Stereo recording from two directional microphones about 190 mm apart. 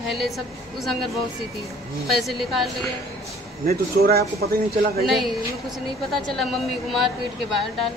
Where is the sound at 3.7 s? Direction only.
55° right (ahead or behind).